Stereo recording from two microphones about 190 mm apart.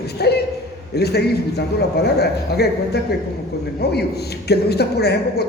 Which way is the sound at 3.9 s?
60° left (ahead or behind).